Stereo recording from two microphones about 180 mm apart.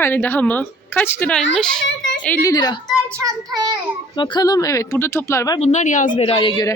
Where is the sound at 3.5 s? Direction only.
20° right (ahead or behind).